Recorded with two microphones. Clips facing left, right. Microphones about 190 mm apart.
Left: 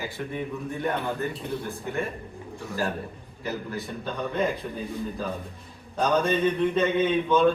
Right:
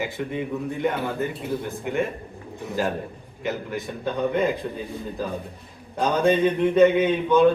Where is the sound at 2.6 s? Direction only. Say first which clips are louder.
Right 4 dB; 20° right (ahead or behind).